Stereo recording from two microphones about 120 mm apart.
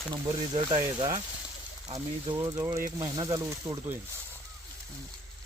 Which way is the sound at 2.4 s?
25° right (ahead or behind).